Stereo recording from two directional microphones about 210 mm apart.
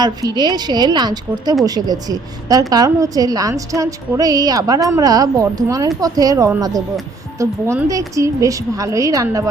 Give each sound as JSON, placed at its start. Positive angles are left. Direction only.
{"t": 0.0, "sound": "a woman's voice", "side_deg": -20}